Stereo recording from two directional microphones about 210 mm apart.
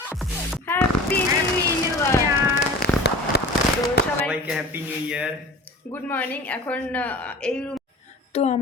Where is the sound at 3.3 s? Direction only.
50° left (ahead or behind).